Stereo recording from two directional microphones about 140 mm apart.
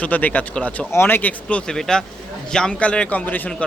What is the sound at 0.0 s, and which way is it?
Speech, 10° left (ahead or behind).